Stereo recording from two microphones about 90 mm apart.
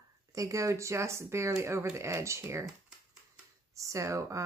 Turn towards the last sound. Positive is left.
turn(degrees=-35)  # may be behind; listen again after turning